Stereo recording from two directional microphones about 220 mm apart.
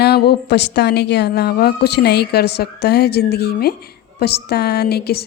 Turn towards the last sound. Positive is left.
turn(degrees=45)  # may be behind; listen again after turning